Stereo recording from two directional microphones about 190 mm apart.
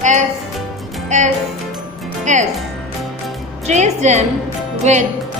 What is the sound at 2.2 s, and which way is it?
Music, 40° right (ahead or behind).